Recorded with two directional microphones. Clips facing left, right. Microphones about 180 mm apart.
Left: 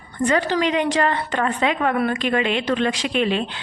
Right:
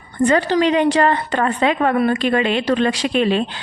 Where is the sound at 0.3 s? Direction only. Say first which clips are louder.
Right 4 dB; 30° right (ahead or behind).